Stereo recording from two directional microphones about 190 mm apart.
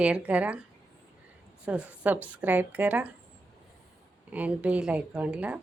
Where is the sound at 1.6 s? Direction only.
5° right (ahead or behind).